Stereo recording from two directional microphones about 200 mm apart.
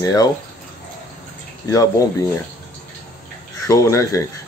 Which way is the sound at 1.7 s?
15° left (ahead or behind).